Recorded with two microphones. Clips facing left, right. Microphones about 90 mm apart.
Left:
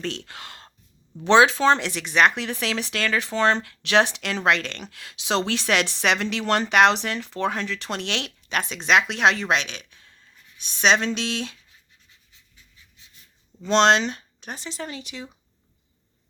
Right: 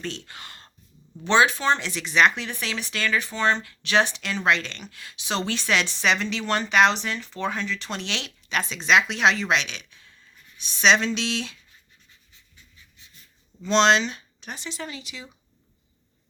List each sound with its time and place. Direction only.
0.0 s speech: 90° left
1.2 s speech: 80° left; by 11.6 s 45° left (ahead or behind)
13.6 s speech: 50° left (ahead or behind)